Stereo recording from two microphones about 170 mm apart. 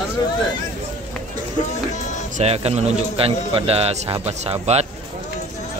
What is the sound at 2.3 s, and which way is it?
A man's voice, 40° right (ahead or behind).